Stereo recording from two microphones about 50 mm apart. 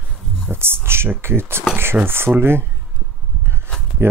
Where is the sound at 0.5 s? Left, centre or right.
Right.